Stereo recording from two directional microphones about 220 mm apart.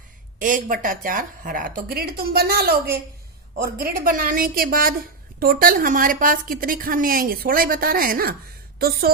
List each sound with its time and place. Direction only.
0.3 s a woman's voice: 35° right (ahead or behind)